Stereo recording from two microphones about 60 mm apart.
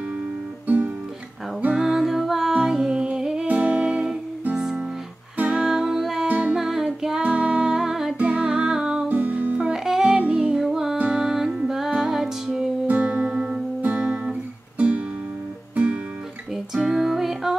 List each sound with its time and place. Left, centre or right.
0.7 s music: right
1.8 s music: centre
3.4 s music: right
6.2 s music: right
6.5 s music: centre
9.1 s music: right
9.7 s music: centre
10.6 s music: centre
11.0 s music: centre
12.8 s music: right
16.5 s music: centre